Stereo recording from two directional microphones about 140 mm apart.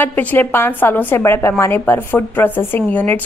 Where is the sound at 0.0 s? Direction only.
15° left (ahead or behind).